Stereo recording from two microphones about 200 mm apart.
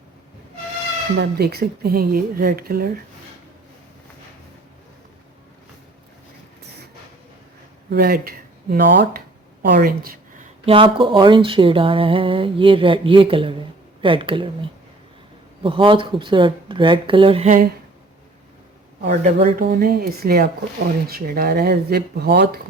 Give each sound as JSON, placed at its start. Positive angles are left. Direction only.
{"t": 1.2, "sound": "speech", "side_deg": -55}
{"t": 7.9, "sound": "speech", "side_deg": -50}
{"t": 10.7, "sound": "speech", "side_deg": -25}
{"t": 15.6, "sound": "speech", "side_deg": -25}
{"t": 19.0, "sound": "speech", "side_deg": -35}
{"t": 19.6, "sound": "speech", "side_deg": -50}